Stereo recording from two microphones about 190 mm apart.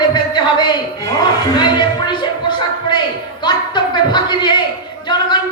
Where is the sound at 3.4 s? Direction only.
25° left (ahead or behind).